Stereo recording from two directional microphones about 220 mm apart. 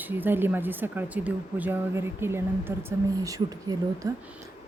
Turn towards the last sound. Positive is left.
turn(degrees=-15)  # may be behind; listen again after turning